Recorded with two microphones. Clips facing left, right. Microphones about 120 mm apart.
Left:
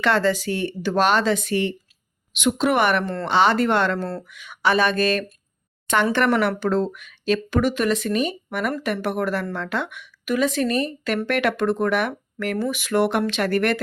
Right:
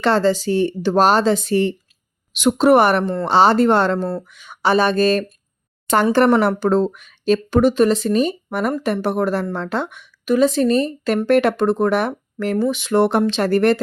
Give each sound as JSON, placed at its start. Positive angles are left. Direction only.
{"t": 0.0, "sound": "speech", "side_deg": -30}
{"t": 3.0, "sound": "speech", "side_deg": -20}
{"t": 3.2, "sound": "speech", "side_deg": -35}